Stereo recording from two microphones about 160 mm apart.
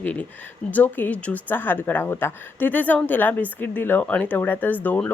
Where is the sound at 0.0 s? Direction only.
10° left (ahead or behind).